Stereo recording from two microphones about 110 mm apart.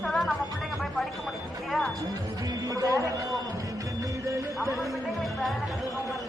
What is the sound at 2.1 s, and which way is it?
A man's voice, 35° right (ahead or behind).